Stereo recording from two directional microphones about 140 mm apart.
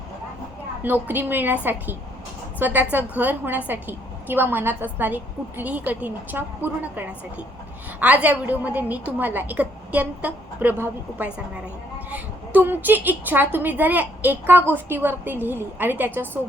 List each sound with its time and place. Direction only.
0.8 s a woman's voice: 15° right (ahead or behind)
2.6 s a woman's voice: 10° right (ahead or behind)